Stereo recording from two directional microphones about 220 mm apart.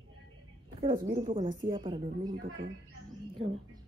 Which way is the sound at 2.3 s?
45° right (ahead or behind).